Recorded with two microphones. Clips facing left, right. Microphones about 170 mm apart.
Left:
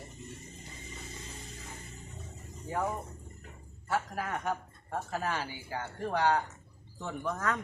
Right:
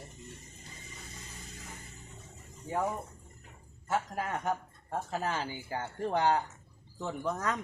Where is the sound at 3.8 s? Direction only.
20° right (ahead or behind).